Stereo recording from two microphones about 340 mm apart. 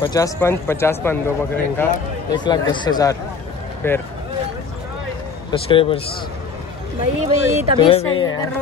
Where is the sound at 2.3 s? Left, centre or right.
Centre.